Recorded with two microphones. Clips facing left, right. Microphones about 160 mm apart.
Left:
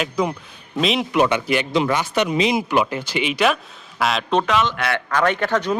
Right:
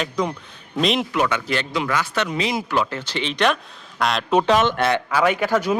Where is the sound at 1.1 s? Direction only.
20° left (ahead or behind).